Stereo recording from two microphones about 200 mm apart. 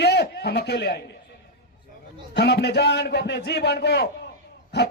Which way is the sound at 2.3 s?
55° left (ahead or behind).